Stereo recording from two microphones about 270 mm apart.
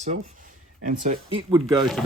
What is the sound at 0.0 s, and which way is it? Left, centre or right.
Speech, right.